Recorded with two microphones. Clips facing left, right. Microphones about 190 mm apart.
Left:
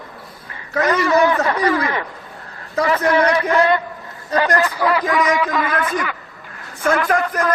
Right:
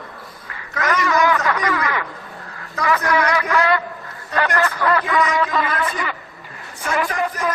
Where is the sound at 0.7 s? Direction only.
35° left (ahead or behind); by 5.0 s 15° left (ahead or behind).